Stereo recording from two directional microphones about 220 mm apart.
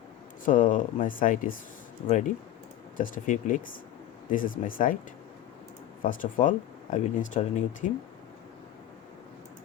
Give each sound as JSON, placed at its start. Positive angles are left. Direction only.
{"t": 0.4, "sound": "speech", "side_deg": 35}
{"t": 6.0, "sound": "speech", "side_deg": 35}